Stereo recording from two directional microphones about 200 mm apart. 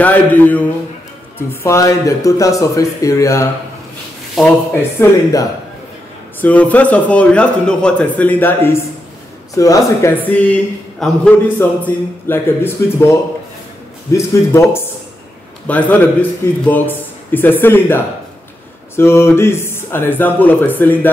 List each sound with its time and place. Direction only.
0.0 s a man's voice: 10° left (ahead or behind)
6.4 s a man's voice: 5° left (ahead or behind)
14.1 s a man's voice: 15° left (ahead or behind)